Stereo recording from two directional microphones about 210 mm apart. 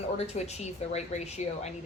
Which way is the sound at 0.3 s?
30° left (ahead or behind).